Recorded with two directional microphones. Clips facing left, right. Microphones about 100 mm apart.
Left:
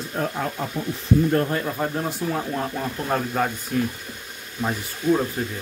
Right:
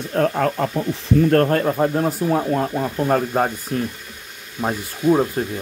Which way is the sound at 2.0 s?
50° right (ahead or behind).